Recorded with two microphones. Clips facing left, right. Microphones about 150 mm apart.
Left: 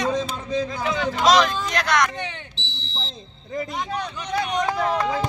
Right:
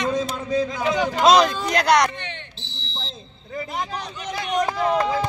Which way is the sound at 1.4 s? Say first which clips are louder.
Right 2 dB; 35° right (ahead or behind).